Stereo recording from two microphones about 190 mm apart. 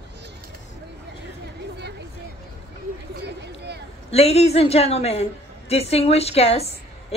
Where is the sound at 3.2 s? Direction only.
60° right (ahead or behind).